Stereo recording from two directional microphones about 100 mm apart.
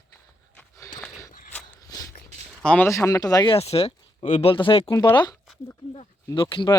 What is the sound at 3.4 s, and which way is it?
Speech, 80° left.